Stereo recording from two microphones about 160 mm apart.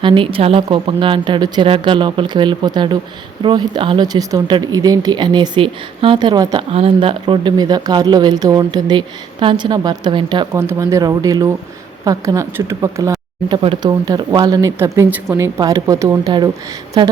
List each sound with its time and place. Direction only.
0.0 s a woman's voice: 30° right (ahead or behind)
10.5 s speech: 15° right (ahead or behind)
14.8 s a woman's voice: 15° right (ahead or behind); by 17.1 s 30° right (ahead or behind)